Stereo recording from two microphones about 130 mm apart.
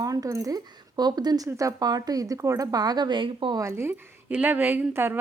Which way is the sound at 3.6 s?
20° right (ahead or behind).